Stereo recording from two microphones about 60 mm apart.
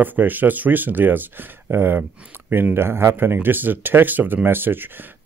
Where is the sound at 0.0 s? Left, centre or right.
Right.